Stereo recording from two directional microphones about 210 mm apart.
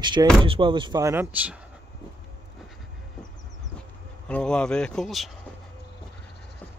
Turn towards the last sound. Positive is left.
turn(degrees=0)  # may be behind; listen again after turning